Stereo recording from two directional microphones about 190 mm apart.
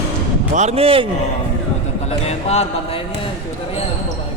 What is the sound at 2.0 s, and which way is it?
Speech, 35° left (ahead or behind).